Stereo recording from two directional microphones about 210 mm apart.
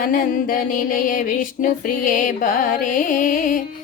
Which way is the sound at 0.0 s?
40° left (ahead or behind).